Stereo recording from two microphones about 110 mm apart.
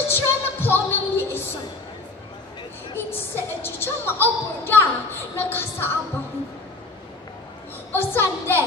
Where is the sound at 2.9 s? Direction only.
20° left (ahead or behind).